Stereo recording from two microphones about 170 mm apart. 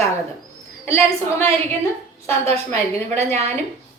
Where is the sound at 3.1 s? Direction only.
40° right (ahead or behind).